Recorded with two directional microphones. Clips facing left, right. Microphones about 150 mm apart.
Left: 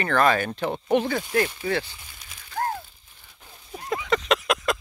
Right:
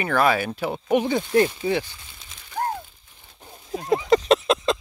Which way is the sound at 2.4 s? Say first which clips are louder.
Right 1 dB; 10° right (ahead or behind).